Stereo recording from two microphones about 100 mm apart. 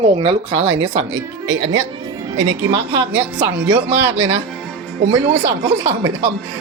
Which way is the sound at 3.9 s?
85° right.